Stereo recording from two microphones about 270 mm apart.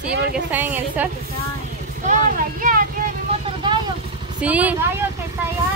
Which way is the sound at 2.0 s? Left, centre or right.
Right.